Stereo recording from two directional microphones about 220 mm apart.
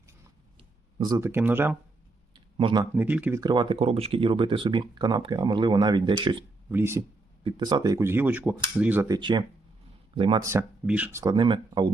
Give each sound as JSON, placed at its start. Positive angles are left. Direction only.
{"t": 0.9, "sound": "speech", "side_deg": -15}
{"t": 2.3, "sound": "a sound", "side_deg": -20}
{"t": 2.9, "sound": "speech", "side_deg": -5}
{"t": 6.7, "sound": "speech", "side_deg": -10}
{"t": 10.4, "sound": "speech", "side_deg": -10}